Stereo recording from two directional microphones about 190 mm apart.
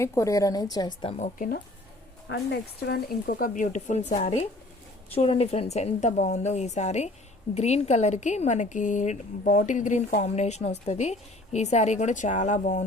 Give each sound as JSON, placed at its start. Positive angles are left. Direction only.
{"t": 0.0, "sound": "a woman's voice", "side_deg": 15}
{"t": 1.4, "sound": "speech", "side_deg": 50}
{"t": 2.2, "sound": "speech", "side_deg": 60}